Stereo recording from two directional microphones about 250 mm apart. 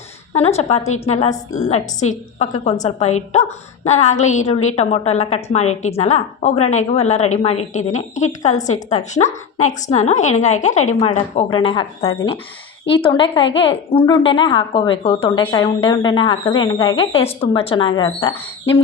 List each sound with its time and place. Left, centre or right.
0.3 s a woman's voice: left